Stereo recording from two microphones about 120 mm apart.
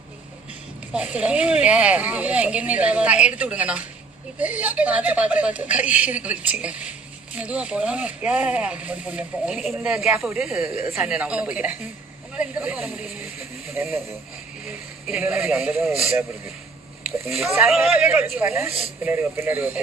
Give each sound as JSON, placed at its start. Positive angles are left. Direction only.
{"t": 0.9, "sound": "speech", "side_deg": -10}
{"t": 15.0, "sound": "speech", "side_deg": -5}
{"t": 17.2, "sound": "speech", "side_deg": 0}
{"t": 17.9, "sound": "speech", "side_deg": -10}